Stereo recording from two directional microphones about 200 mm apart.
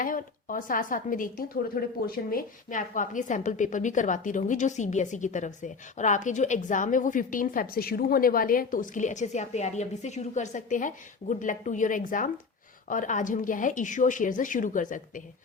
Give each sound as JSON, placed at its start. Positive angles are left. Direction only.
{"t": 0.0, "sound": "a woman's voice", "side_deg": 45}